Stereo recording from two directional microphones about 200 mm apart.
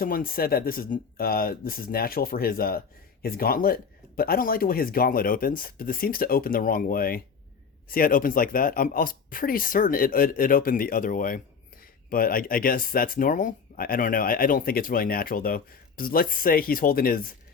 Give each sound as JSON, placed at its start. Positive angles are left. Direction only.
{"t": 0.0, "sound": "speech", "side_deg": 45}